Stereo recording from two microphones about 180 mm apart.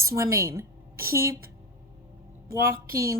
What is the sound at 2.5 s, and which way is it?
Speech, 15° right (ahead or behind).